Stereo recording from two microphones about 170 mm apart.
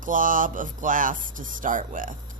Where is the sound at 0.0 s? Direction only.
50° right (ahead or behind).